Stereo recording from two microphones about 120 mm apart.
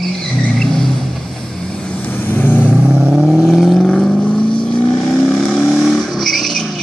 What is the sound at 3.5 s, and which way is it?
Vehicle, 5° left (ahead or behind).